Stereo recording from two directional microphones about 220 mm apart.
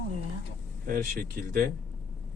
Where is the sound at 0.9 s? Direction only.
40° right (ahead or behind).